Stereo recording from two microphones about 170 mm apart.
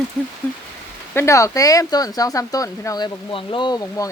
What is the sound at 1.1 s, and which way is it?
Speech, 15° left (ahead or behind).